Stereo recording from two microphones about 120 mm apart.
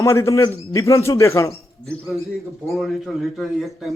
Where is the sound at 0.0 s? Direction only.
25° left (ahead or behind).